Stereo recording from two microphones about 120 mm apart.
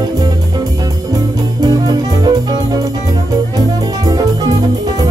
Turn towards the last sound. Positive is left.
turn(degrees=-35)  # may be behind; listen again after turning